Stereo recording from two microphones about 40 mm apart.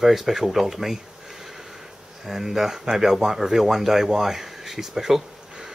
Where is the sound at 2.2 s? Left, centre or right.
Centre.